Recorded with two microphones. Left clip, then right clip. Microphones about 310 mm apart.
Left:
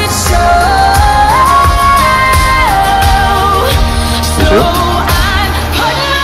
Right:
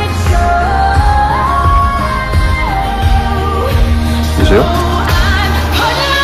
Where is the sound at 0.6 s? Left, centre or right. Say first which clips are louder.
Left 4 dB; left.